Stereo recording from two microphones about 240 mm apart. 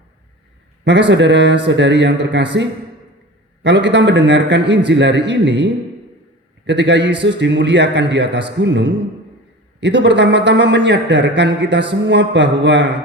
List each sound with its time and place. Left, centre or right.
0.9 s a man's voice: right